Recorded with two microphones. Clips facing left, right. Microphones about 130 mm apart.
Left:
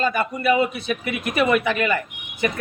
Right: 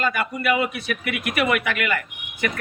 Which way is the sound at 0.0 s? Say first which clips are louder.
Left 2 dB; 25° left (ahead or behind).